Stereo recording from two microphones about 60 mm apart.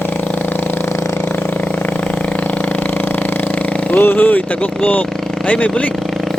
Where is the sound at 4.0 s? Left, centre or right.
Left.